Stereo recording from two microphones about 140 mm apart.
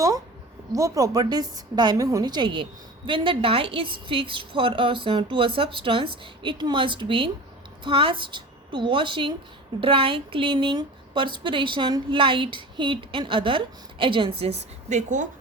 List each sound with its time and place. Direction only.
0.7 s a woman's voice: 25° right (ahead or behind); by 15.3 s 60° right (ahead or behind)